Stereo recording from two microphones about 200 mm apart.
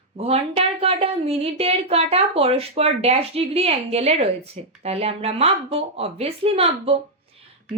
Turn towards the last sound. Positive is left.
turn(degrees=-30)  # may be behind; listen again after turning